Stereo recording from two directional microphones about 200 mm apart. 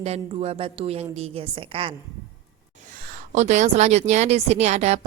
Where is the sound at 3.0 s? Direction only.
40° right (ahead or behind).